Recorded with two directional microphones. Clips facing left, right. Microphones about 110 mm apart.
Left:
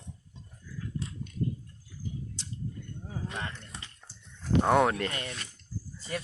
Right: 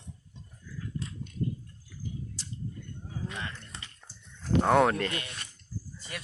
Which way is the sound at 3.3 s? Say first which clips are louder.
Left 3 dB; 30° left (ahead or behind).